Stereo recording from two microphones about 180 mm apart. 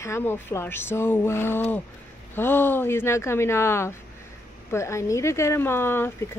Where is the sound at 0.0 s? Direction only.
15° left (ahead or behind).